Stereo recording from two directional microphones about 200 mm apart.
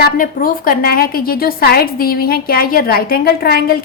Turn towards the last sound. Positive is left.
turn(degrees=50)  # may be behind; listen again after turning